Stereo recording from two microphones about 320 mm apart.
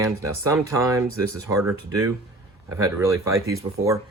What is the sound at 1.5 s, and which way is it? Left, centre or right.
Speech, centre.